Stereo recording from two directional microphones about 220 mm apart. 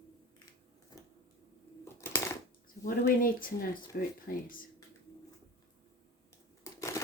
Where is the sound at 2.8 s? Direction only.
40° left (ahead or behind).